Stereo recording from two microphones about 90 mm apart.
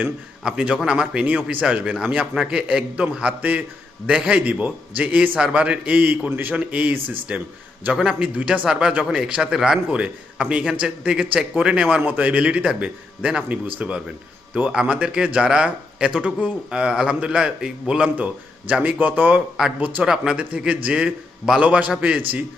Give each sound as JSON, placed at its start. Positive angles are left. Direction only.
{"t": 0.4, "sound": "speech", "side_deg": -10}